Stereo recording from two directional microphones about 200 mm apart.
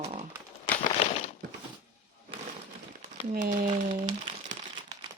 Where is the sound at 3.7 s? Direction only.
35° right (ahead or behind).